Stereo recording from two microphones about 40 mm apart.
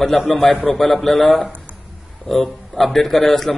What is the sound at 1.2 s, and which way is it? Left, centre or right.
Speech, left.